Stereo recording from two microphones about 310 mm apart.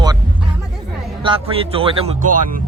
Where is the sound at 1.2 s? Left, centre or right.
Centre.